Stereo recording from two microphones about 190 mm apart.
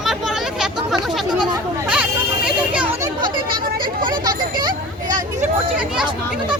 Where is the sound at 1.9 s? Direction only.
5° right (ahead or behind).